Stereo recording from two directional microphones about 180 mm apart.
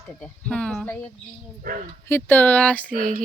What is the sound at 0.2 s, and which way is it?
Speech, 5° left (ahead or behind).